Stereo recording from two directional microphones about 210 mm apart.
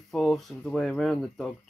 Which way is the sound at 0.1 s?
Centre (ahead or behind).